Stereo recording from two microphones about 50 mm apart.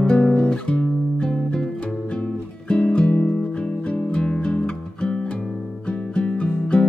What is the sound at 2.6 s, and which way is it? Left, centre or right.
Music, left.